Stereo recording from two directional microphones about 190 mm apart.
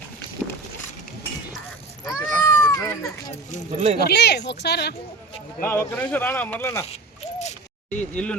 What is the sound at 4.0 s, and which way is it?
Speech, 60° left (ahead or behind).